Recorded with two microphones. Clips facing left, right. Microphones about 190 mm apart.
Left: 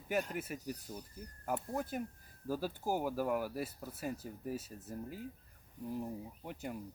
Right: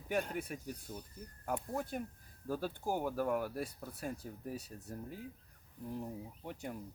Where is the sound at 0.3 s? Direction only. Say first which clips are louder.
Left 1 dB; 5° left (ahead or behind).